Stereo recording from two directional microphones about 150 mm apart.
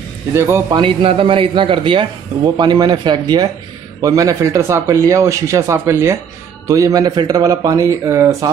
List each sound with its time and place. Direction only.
0.3 s a man's voice: 15° right (ahead or behind)
0.7 s a man's voice: 35° right (ahead or behind); by 8.5 s 20° right (ahead or behind)